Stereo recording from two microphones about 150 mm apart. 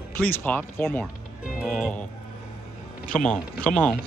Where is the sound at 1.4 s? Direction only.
10° right (ahead or behind).